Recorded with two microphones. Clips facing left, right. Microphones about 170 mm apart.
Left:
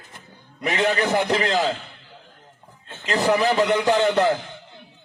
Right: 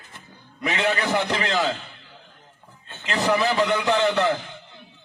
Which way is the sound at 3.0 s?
40° left (ahead or behind).